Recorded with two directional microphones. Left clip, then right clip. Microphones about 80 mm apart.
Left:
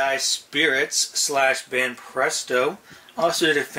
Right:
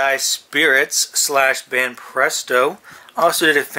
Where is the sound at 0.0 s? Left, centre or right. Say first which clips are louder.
Right 4 dB; right.